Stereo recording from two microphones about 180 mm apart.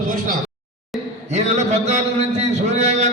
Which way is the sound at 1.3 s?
40° right (ahead or behind).